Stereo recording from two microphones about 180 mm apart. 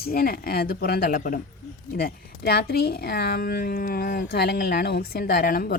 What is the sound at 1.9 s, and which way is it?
A woman's voice, 60° left (ahead or behind).